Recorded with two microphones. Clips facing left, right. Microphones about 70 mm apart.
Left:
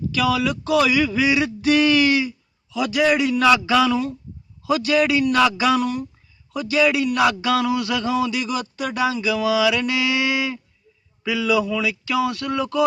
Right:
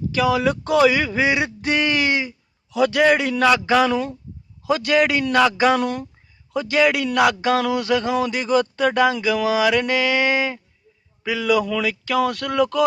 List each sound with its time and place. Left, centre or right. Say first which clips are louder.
0.1 s speech: right 2 dB; right
7.5 s speech: right 1 dB; right
11.8 s speech: right 1 dB; right